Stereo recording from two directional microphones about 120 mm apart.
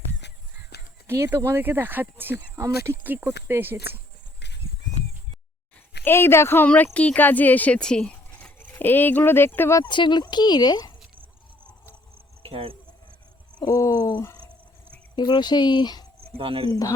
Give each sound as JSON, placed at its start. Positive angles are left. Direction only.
{"t": 1.0, "sound": "speech", "side_deg": -20}
{"t": 6.1, "sound": "speech", "side_deg": 20}
{"t": 8.5, "sound": "speech", "side_deg": 20}
{"t": 9.9, "sound": "speech", "side_deg": 40}
{"t": 12.4, "sound": "cricket", "side_deg": -50}
{"t": 13.7, "sound": "a sound", "side_deg": 25}
{"t": 15.1, "sound": "speech", "side_deg": 35}
{"t": 16.4, "sound": "speech", "side_deg": -50}
{"t": 16.6, "sound": "a sound", "side_deg": 30}